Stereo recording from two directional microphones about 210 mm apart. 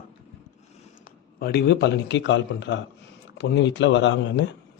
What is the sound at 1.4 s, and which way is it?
Speech, 50° left (ahead or behind).